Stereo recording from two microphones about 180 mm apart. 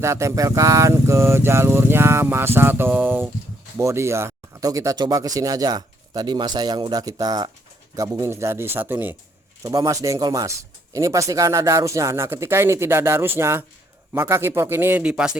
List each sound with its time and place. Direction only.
0.0 s speech: 15° right (ahead or behind)